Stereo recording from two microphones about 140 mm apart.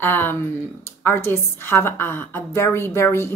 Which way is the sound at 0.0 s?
15° left (ahead or behind).